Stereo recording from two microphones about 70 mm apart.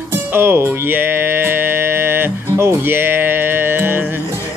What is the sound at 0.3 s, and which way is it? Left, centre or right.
Music, right.